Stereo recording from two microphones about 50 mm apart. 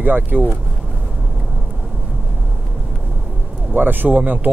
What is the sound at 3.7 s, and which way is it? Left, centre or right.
Speech, right.